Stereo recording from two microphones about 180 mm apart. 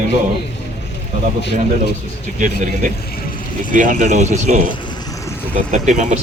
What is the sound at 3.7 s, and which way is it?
Speech, 50° right (ahead or behind).